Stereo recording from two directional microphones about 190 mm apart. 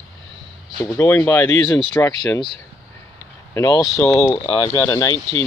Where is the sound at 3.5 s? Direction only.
20° left (ahead or behind).